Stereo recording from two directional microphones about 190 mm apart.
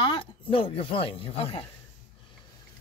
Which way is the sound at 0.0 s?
25° left (ahead or behind).